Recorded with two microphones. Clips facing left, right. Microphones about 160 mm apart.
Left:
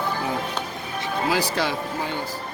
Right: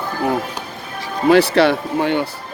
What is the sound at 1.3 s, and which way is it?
Speech, 65° right (ahead or behind).